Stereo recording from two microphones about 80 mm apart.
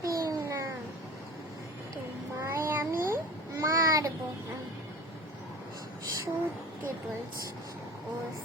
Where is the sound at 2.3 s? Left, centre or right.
Right.